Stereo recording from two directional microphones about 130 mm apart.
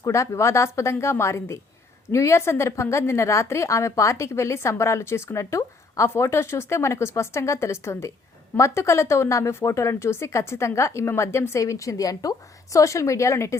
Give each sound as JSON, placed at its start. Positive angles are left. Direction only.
{"t": 0.0, "sound": "a woman's voice", "side_deg": 20}